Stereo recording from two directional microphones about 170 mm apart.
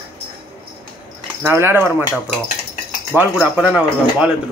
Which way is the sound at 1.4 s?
15° right (ahead or behind).